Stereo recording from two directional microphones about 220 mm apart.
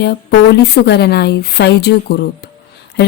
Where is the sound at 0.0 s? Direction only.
45° left (ahead or behind).